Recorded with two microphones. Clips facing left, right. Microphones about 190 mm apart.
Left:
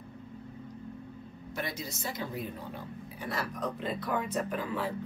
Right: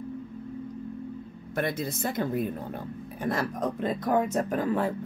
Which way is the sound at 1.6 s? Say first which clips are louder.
Right 8 dB; 55° right (ahead or behind).